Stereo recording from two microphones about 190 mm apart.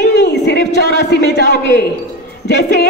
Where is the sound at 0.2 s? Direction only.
60° left (ahead or behind).